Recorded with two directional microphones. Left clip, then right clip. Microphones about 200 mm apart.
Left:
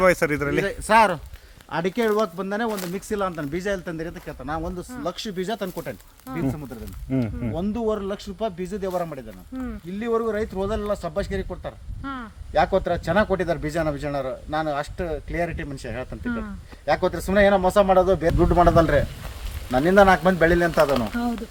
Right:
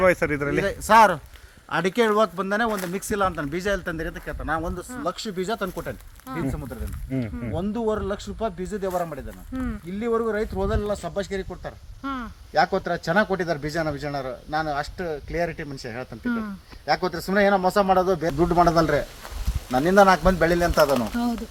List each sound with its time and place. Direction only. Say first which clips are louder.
0.1 s speech: left 1 dB; 5° left (ahead or behind)
0.6 s speech: right 2 dB; 40° right (ahead or behind); by 4.7 s 20° right (ahead or behind)
5.0 s speech: right 1 dB; centre (ahead or behind)
7.1 s a man's voice: left 4 dB; 25° left (ahead or behind)
7.5 s speech: even; 5° left (ahead or behind)
9.5 s speech: right 2 dB; 55° right (ahead or behind)
10.0 s speech: even; 10° left (ahead or behind)
12.0 s speech: right 2 dB; 55° right (ahead or behind)
12.5 s speech: left 1 dB; 10° left (ahead or behind)
16.2 s speech: right 4 dB; 55° right (ahead or behind)
16.8 s a man's voice: left 2 dB; 20° left (ahead or behind)
20.7 s speech: even; 5° left (ahead or behind)